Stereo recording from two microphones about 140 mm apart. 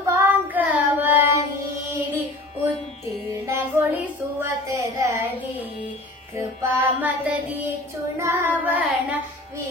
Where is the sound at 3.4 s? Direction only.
15° right (ahead or behind).